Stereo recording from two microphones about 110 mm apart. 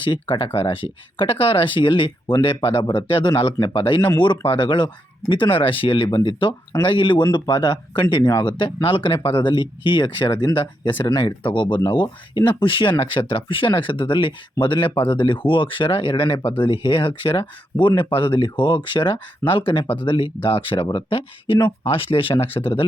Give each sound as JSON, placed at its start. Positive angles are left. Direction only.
{"t": 0.0, "sound": "speech", "side_deg": 50}
{"t": 6.1, "sound": "speech", "side_deg": 35}
{"t": 6.8, "sound": "speech", "side_deg": 50}